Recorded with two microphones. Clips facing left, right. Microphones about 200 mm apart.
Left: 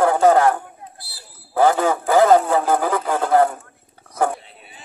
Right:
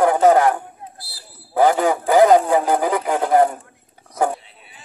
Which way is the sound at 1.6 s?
15° right (ahead or behind).